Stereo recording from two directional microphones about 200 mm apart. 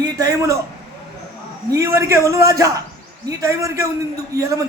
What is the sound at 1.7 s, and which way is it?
A man's voice, 15° right (ahead or behind).